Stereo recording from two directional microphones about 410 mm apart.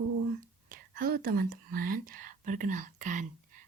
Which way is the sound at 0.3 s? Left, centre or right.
Centre.